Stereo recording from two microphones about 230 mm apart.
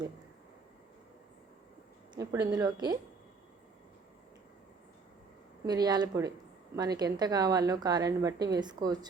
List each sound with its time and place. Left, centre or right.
2.1 s a woman's voice: centre
5.6 s a woman's voice: centre